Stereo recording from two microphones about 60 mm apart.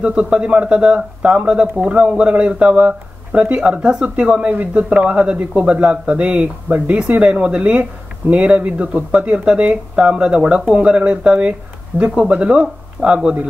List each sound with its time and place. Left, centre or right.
0.0 s speech: centre
11.9 s speech: right
12.4 s speech: centre